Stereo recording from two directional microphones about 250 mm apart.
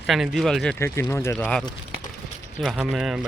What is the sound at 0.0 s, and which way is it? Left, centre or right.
Speech, centre.